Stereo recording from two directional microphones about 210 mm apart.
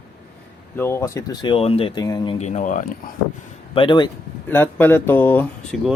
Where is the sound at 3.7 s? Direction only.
25° left (ahead or behind).